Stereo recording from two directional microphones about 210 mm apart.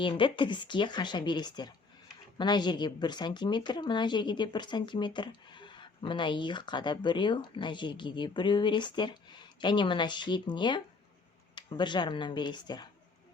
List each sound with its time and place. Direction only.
0.0 s speech: 25° left (ahead or behind)